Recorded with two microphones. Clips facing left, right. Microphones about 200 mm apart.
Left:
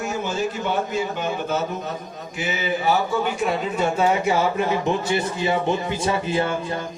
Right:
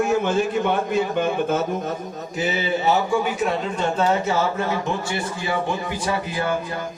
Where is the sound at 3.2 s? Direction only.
Centre (ahead or behind).